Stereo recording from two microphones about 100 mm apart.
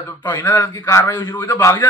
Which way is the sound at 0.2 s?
25° left (ahead or behind).